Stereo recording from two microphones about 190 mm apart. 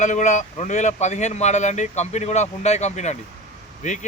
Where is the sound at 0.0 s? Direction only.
40° left (ahead or behind).